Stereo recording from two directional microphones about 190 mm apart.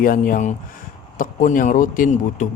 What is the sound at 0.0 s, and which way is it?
Speech, 45° left (ahead or behind).